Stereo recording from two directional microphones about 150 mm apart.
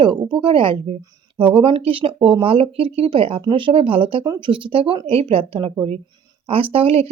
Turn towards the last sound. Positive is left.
turn(degrees=-40)  # may be behind; listen again after turning